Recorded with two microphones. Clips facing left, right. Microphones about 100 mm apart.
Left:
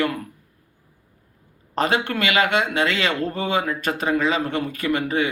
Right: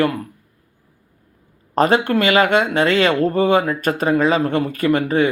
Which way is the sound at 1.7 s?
45° right (ahead or behind).